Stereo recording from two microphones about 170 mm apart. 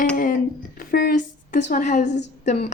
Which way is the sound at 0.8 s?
60° left (ahead or behind).